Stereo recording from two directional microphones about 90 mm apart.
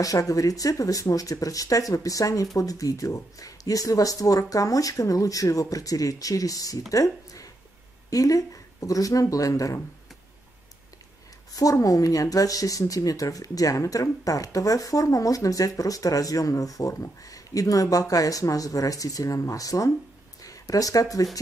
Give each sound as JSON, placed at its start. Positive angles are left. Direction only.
{"t": 0.0, "sound": "speech", "side_deg": 40}
{"t": 11.5, "sound": "speech", "side_deg": 40}